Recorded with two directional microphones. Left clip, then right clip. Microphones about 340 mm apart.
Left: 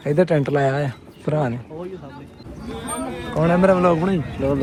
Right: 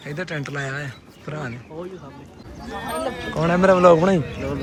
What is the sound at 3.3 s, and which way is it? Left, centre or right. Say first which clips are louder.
Speech: left 1 dB; centre.